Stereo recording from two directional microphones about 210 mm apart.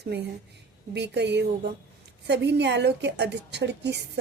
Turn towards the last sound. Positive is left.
turn(degrees=-55)  # may be behind; listen again after turning